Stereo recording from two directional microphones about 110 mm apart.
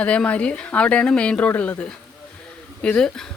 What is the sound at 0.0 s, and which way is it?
Speech, 10° left (ahead or behind).